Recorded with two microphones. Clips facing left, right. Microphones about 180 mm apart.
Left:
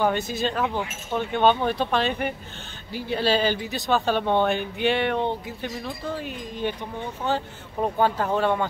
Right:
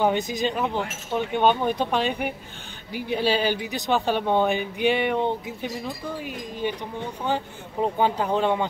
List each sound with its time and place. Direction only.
0.0 s speech: 15° right (ahead or behind)